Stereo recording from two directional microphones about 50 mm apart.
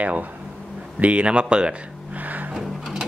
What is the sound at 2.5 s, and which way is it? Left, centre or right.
Sewing machine, centre.